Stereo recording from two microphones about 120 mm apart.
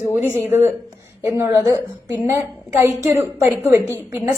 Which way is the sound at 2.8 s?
25° right (ahead or behind).